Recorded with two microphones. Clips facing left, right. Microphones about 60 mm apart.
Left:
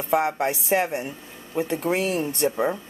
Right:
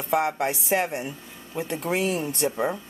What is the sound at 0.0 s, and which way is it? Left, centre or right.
A woman's voice, centre.